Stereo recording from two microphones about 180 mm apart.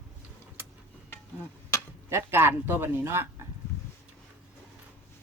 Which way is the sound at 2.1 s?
15° right (ahead or behind).